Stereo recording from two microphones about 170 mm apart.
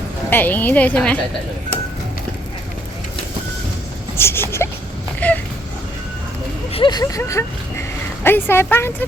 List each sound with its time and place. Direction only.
0.3 s a woman's voice: 10° left (ahead or behind)
4.2 s a woman's voice: 15° left (ahead or behind)
5.2 s a sound: 10° left (ahead or behind)
6.7 s a woman's voice: 25° left (ahead or behind)